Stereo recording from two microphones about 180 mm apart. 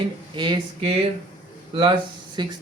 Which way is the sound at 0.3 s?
25° right (ahead or behind).